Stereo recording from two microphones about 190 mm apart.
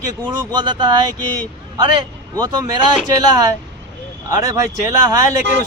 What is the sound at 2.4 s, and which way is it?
A man's voice, 25° right (ahead or behind).